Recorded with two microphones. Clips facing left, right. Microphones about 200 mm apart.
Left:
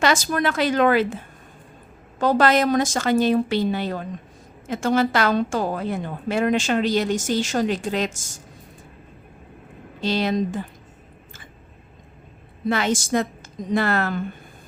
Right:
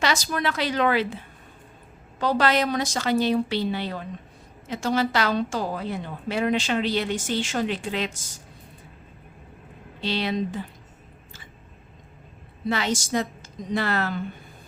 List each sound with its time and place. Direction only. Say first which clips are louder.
0.0 s a woman's voice: left 4 dB; 50° left (ahead or behind)
10.0 s a woman's voice: left 4 dB; 45° left (ahead or behind)
12.6 s a woman's voice: left 4 dB; 50° left (ahead or behind)